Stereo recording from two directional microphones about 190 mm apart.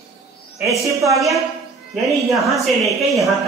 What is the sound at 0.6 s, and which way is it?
Speech, 15° right (ahead or behind).